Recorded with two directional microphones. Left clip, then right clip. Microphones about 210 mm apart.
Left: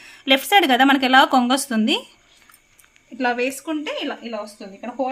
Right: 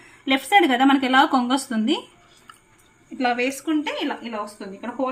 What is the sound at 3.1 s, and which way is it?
A woman's voice, 40° left (ahead or behind).